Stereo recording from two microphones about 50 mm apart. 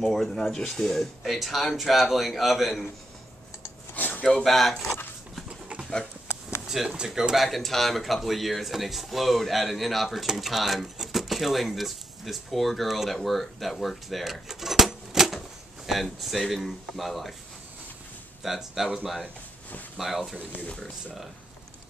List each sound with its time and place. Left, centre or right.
0.0 s speech: centre
1.2 s speech: centre
3.9 s dishes: left
4.4 s speech: centre
6.7 s speech: centre
7.3 s speech: centre
14.5 s a sound: centre
15.9 s speech: centre
18.4 s speech: centre
20.0 s speech: centre